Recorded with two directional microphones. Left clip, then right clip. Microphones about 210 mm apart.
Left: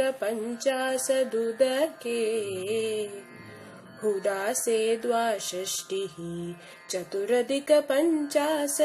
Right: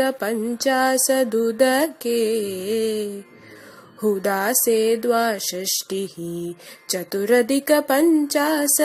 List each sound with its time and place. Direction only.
0.0 s music: 45° right (ahead or behind)
4.2 s music: 45° right (ahead or behind)